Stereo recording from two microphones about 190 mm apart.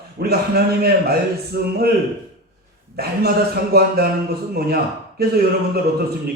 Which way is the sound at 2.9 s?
55° right (ahead or behind).